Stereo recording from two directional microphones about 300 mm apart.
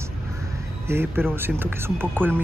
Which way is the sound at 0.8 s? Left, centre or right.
Centre.